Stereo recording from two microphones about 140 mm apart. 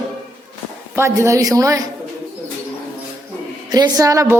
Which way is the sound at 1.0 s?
20° right (ahead or behind).